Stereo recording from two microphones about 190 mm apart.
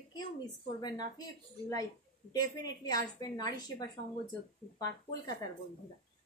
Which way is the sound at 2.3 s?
20° left (ahead or behind).